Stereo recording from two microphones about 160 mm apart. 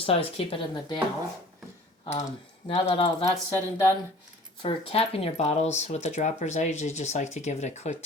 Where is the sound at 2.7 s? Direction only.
35° left (ahead or behind).